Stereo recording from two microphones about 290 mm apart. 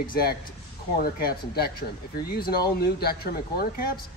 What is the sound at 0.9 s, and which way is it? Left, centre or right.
Speech, left.